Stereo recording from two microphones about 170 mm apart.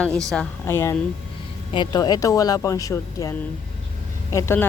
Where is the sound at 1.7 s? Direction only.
25° left (ahead or behind).